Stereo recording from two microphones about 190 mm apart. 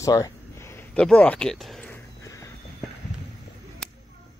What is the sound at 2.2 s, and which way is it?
Horse, 15° left (ahead or behind).